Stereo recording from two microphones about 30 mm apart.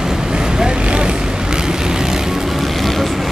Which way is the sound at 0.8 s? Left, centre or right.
Right.